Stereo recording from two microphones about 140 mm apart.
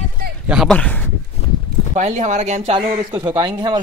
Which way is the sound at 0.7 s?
10° left (ahead or behind).